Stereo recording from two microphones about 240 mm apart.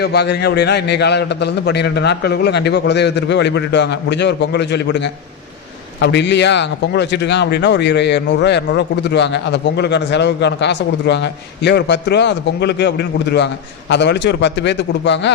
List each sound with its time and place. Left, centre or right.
0.0 s a man's voice: left